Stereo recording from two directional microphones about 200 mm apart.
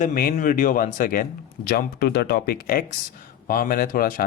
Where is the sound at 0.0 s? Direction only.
45° left (ahead or behind).